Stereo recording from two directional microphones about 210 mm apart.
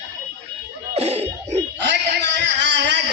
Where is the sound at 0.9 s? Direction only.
30° right (ahead or behind).